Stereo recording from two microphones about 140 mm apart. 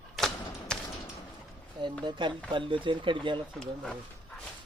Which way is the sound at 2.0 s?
35° right (ahead or behind).